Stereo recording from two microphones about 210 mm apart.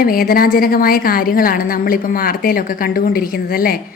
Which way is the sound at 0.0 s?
45° left (ahead or behind).